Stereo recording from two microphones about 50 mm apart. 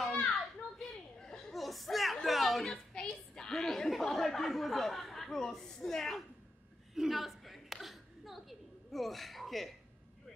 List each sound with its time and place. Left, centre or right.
0.0 s children playing: centre
2.2 s a woman's voice: centre
7.0 s a sound: centre